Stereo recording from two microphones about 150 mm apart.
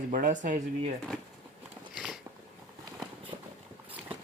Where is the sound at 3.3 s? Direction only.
50° right (ahead or behind).